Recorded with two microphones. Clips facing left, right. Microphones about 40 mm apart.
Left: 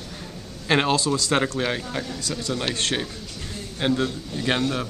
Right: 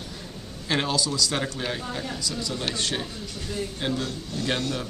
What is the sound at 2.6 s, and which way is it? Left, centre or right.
Speech, left.